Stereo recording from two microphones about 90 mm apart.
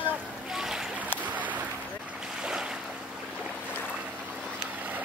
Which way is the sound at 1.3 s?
15° right (ahead or behind).